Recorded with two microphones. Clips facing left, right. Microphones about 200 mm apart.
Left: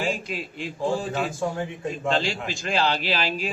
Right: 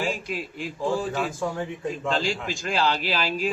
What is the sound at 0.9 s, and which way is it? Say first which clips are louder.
Speech: even; 30° left (ahead or behind).